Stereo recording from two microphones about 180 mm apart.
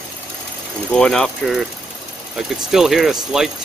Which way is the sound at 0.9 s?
5° left (ahead or behind).